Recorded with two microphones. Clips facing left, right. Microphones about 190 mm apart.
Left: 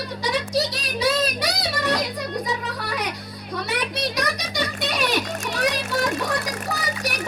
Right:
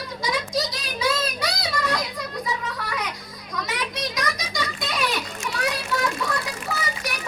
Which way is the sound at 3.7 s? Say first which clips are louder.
Left 4 dB; 65° left (ahead or behind).